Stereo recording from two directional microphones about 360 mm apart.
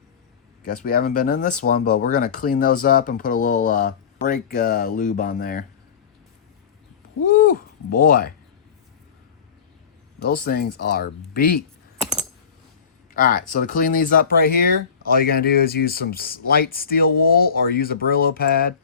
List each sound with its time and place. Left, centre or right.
0.9 s speech: left
7.2 s a sound: left
7.9 s speech: left
10.4 s speech: left
13.1 s speech: left